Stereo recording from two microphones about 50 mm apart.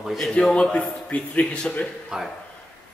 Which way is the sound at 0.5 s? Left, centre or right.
Left.